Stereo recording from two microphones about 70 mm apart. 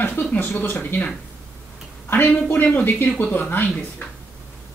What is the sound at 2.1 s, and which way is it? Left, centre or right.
Speech, left.